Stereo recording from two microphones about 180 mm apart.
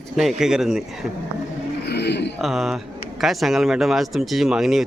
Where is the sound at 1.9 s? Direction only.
70° left (ahead or behind).